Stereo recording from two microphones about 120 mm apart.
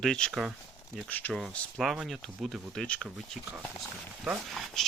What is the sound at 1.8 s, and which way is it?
Speech, centre (ahead or behind).